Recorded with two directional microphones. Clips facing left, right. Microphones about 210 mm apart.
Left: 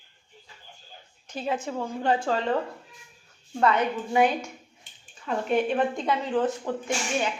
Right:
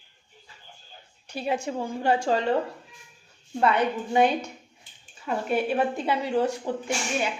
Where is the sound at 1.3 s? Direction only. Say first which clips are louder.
Right 1 dB; 10° right (ahead or behind).